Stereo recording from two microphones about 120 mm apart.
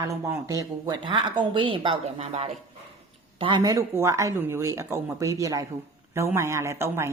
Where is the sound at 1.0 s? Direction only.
40° right (ahead or behind).